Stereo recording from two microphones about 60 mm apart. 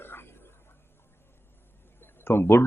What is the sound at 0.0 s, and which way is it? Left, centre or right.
Whispering, left.